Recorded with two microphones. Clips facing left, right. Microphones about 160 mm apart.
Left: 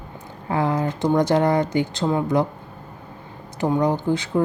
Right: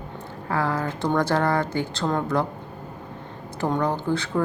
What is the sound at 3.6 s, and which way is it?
Speech, 15° left (ahead or behind).